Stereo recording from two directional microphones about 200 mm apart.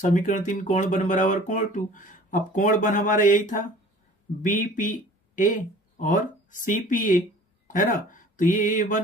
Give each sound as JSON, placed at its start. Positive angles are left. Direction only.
{"t": 0.0, "sound": "speech", "side_deg": 40}